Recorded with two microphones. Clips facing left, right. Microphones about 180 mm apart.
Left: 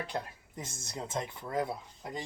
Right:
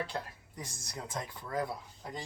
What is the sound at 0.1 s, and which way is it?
A man's voice, 25° left (ahead or behind).